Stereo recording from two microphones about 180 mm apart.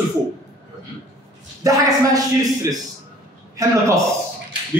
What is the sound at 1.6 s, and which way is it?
A man's voice, 20° right (ahead or behind).